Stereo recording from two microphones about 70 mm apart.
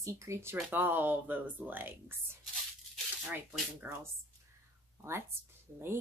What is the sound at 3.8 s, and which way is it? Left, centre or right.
Speech, right.